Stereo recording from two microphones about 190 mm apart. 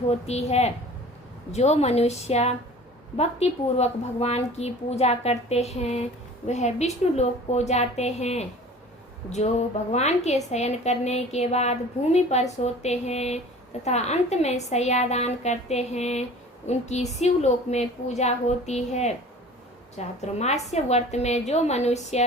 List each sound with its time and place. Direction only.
0.1 s a woman's voice: 35° left (ahead or behind)